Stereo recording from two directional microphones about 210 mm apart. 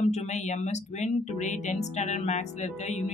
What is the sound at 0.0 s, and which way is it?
Speech, 35° left (ahead or behind).